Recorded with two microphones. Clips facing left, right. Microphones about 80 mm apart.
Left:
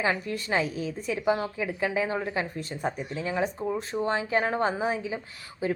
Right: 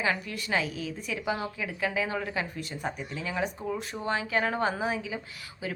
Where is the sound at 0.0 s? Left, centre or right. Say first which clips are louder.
Left 2 dB; left.